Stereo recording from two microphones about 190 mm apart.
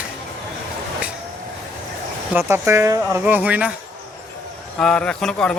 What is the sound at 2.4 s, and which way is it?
Speech, 10° right (ahead or behind).